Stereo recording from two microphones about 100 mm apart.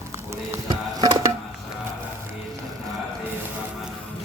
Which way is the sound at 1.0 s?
40° right (ahead or behind).